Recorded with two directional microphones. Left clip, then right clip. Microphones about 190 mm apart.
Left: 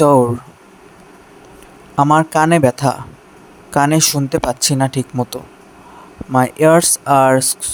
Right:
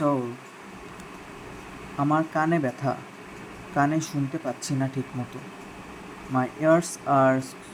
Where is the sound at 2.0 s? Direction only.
55° left (ahead or behind).